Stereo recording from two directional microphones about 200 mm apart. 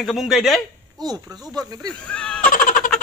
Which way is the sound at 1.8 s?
5° left (ahead or behind).